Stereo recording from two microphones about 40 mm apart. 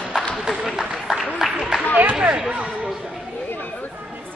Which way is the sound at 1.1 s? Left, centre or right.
Centre.